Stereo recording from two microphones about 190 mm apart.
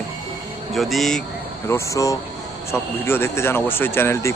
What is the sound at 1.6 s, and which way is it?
A man's voice, 15° left (ahead or behind).